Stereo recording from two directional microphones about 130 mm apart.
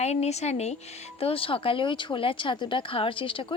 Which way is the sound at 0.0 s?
55° left (ahead or behind).